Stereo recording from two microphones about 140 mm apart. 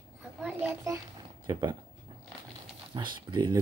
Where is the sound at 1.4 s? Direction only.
35° right (ahead or behind).